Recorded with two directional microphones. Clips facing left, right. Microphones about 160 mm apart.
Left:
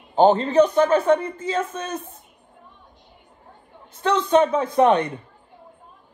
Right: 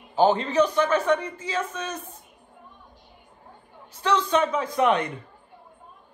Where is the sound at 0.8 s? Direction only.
35° left (ahead or behind).